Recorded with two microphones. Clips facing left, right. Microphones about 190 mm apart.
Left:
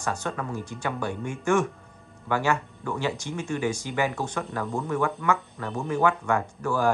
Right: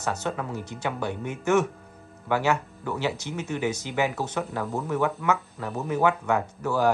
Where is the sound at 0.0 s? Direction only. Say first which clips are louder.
Right 1 dB; 5° right (ahead or behind).